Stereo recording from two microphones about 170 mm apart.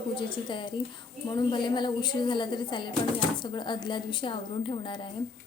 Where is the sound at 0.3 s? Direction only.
30° left (ahead or behind).